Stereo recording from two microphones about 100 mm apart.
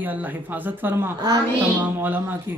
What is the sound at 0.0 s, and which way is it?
A woman's voice, 20° right (ahead or behind).